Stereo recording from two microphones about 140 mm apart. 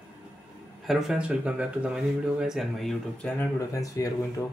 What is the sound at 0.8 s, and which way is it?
Speech, 5° right (ahead or behind).